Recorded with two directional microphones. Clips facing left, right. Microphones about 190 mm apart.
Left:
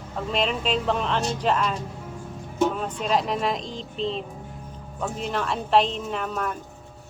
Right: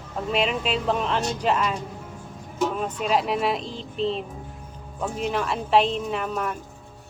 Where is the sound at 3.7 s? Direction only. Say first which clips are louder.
Right 2 dB; 35° left (ahead or behind).